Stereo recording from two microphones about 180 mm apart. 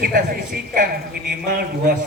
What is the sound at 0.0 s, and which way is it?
A man's voice, 55° right (ahead or behind).